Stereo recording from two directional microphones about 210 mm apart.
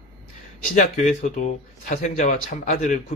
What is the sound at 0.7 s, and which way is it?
Speech, 35° left (ahead or behind).